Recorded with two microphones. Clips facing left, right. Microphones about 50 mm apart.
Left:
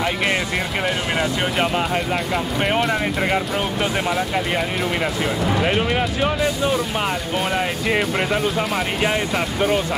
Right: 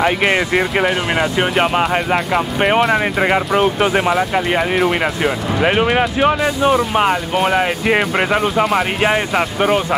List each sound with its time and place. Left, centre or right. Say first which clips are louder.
0.0 s speech: right 6 dB; right